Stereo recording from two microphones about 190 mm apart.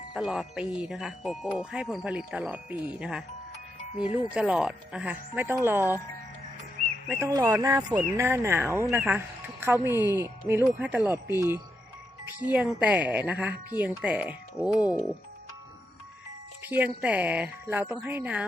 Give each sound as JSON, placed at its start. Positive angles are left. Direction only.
{"t": 0.1, "sound": "speech", "side_deg": 0}
{"t": 7.1, "sound": "speech", "side_deg": -15}
{"t": 16.6, "sound": "speech", "side_deg": -10}